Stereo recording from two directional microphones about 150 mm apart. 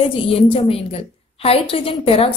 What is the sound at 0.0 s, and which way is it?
A woman's voice, 40° left (ahead or behind).